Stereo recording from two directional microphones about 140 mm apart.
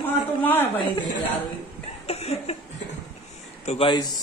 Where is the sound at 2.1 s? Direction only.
45° left (ahead or behind).